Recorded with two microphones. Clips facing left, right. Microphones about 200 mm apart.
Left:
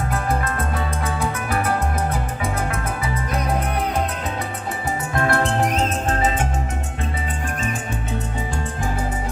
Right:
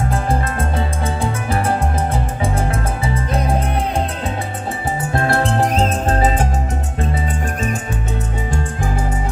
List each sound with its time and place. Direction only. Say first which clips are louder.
0.1 s music: right 3 dB; 25° right (ahead or behind)
5.1 s music: right 2 dB; 30° right (ahead or behind)